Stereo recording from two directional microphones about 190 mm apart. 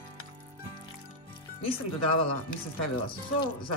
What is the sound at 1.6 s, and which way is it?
Speech, 30° left (ahead or behind).